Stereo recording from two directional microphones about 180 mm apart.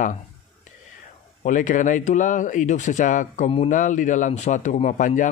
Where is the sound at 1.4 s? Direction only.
45° left (ahead or behind).